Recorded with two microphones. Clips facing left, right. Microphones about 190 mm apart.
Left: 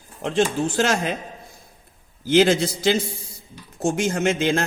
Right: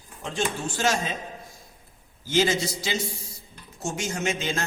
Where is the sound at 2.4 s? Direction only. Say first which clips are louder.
Left 6 dB; 60° left (ahead or behind).